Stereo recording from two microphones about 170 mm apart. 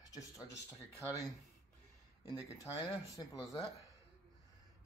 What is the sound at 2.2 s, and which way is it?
Speech, 25° left (ahead or behind).